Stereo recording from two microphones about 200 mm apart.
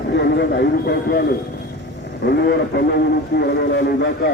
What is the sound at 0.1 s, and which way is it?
Speech, 55° left (ahead or behind).